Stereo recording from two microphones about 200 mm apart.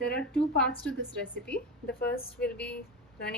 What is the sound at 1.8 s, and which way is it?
Speech, 50° left (ahead or behind).